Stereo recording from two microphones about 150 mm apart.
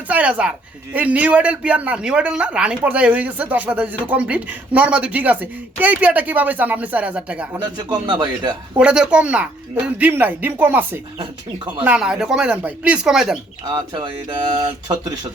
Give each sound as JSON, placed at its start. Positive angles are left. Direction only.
{"t": 0.1, "sound": "speech", "side_deg": -10}
{"t": 8.0, "sound": "speech", "side_deg": -30}
{"t": 8.8, "sound": "speech", "side_deg": -5}
{"t": 13.7, "sound": "speech", "side_deg": -30}